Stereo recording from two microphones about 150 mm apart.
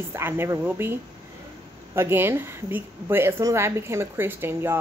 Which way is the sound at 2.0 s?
15° right (ahead or behind).